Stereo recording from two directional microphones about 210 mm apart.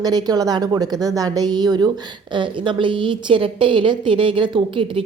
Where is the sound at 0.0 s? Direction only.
20° right (ahead or behind).